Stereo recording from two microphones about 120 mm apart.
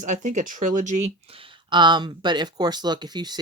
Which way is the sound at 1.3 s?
45° right (ahead or behind).